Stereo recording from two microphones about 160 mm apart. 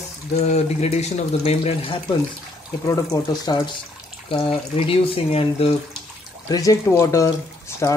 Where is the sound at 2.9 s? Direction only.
20° left (ahead or behind).